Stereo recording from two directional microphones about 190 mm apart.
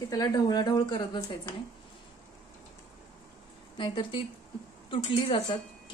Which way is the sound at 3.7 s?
25° left (ahead or behind).